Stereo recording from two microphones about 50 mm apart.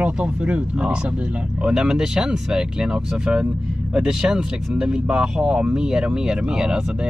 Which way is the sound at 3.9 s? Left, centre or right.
Centre.